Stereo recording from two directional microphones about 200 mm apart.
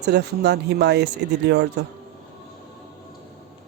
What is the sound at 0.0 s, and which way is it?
Speech, 55° right (ahead or behind).